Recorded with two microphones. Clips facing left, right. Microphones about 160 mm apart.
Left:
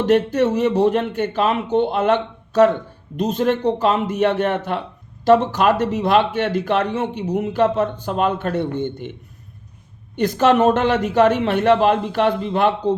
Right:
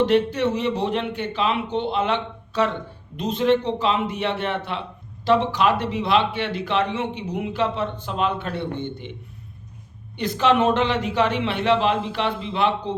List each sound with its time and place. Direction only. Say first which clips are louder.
0.0 s speech: left 3 dB; 45° left (ahead or behind)
10.2 s speech: left 4 dB; 45° left (ahead or behind)